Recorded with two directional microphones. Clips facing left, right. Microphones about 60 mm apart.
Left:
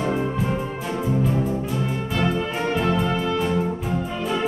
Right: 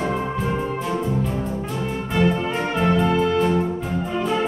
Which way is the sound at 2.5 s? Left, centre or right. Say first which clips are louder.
Right 2 dB; centre.